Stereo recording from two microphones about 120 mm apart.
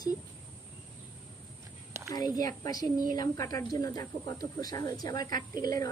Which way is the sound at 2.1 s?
30° left (ahead or behind).